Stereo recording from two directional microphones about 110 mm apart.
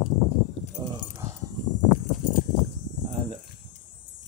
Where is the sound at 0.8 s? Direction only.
35° right (ahead or behind).